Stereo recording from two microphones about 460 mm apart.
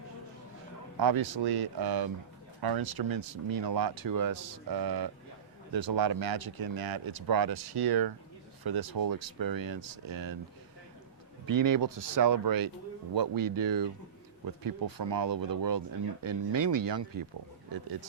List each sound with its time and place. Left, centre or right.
0.9 s speech: right
11.4 s speech: right